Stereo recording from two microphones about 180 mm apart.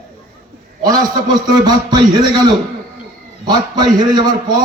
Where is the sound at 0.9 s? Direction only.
20° right (ahead or behind).